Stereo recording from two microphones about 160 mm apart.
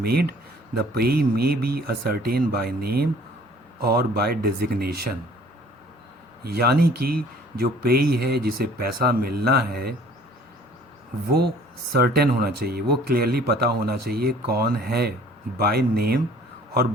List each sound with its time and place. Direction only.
0.0 s speech: 75° right (ahead or behind)
6.4 s speech: 80° right
11.3 s speech: 80° right